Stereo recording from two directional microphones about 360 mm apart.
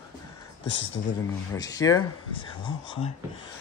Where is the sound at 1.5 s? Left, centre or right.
Centre.